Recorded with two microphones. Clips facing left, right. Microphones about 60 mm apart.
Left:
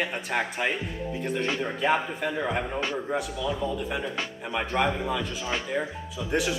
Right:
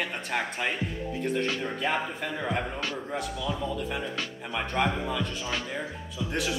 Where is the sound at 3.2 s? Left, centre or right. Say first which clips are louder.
Left 2 dB; centre.